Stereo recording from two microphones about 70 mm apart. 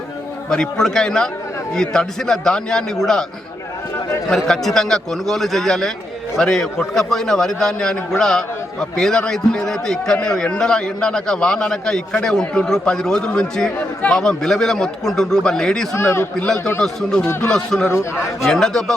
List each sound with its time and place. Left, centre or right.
0.5 s a man's voice: centre
4.4 s a man's voice: centre
16.0 s a man's voice: left
16.8 s a man's voice: centre